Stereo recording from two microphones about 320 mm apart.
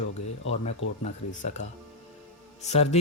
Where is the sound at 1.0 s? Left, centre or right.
Left.